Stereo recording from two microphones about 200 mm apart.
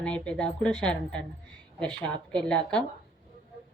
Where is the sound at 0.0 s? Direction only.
5° left (ahead or behind).